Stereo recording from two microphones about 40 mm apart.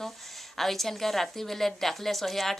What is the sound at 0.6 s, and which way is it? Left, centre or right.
A woman's voice, centre.